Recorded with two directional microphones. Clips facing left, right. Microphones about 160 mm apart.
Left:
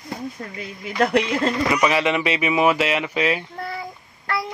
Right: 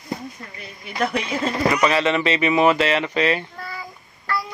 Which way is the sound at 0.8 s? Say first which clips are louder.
Left 4 dB; 75° left (ahead or behind).